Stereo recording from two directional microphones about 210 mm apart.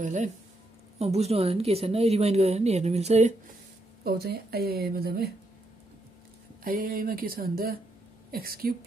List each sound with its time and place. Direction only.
0.0 s a woman's voice: 35° right (ahead or behind)
4.0 s speech: 50° right (ahead or behind)
6.6 s speech: 45° right (ahead or behind)